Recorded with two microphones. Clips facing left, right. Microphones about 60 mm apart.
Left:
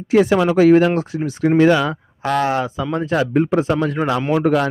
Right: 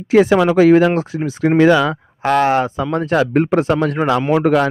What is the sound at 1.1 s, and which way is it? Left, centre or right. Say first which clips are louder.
Speech: right 1 dB; right.